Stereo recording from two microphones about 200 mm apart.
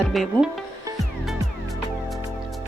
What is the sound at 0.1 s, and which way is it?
Speech, centre (ahead or behind).